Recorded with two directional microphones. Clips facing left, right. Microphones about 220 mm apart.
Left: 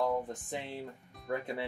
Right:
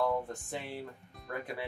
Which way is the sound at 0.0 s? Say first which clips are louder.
Even; 15° left (ahead or behind).